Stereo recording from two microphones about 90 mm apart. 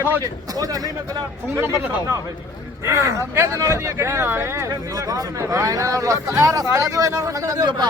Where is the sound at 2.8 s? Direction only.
35° right (ahead or behind).